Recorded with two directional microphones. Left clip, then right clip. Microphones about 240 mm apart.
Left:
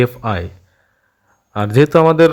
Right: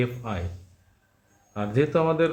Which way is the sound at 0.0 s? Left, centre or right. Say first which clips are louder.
Left 12 dB; left.